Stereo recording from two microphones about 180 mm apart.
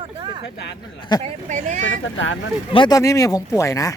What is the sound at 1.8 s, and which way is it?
Speech, 90° left.